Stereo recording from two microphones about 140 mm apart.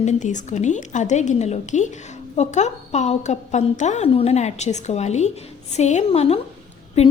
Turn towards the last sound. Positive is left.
turn(degrees=50)  # may be behind; listen again after turning